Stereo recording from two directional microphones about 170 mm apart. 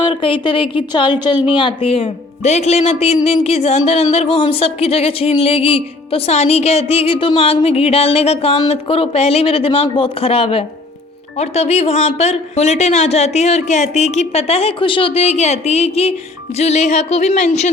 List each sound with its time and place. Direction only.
0.0 s speech: 30° left (ahead or behind)